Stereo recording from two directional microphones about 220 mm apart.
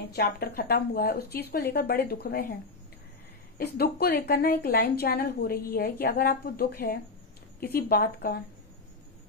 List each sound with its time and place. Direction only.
0.1 s a woman's voice: 45° left (ahead or behind)
3.5 s a woman's voice: 45° left (ahead or behind)